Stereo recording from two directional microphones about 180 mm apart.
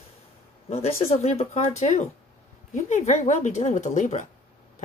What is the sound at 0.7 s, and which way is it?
Speech, 35° left (ahead or behind).